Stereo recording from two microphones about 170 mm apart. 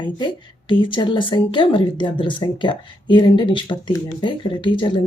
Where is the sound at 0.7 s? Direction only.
30° left (ahead or behind).